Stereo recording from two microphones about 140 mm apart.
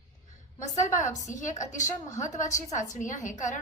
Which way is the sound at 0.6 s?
60° left (ahead or behind).